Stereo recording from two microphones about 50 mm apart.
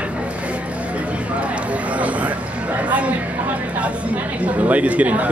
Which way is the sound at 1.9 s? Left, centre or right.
Right.